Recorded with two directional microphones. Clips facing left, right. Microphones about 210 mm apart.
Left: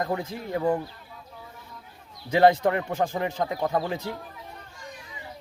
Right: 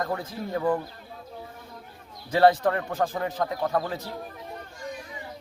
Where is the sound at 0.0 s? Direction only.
15° left (ahead or behind).